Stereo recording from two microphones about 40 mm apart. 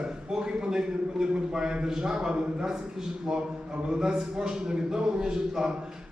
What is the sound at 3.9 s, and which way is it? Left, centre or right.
A man's voice, right.